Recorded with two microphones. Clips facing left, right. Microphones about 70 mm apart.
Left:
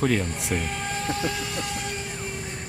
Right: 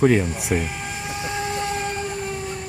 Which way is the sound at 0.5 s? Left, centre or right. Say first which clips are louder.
Even; centre.